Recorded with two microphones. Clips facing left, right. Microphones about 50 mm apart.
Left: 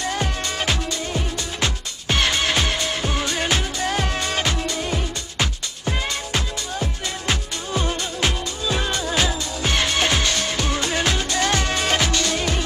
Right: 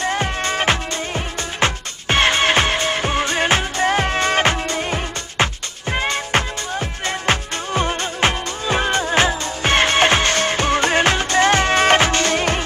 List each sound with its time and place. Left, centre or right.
0.0 s music: right